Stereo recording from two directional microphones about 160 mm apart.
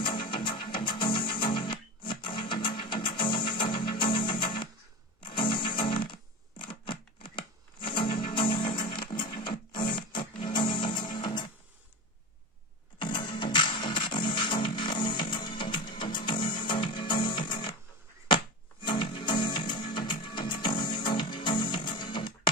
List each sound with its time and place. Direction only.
0.0 s music: 30° left (ahead or behind)
13.0 s music: 30° left (ahead or behind)
18.8 s music: 30° left (ahead or behind)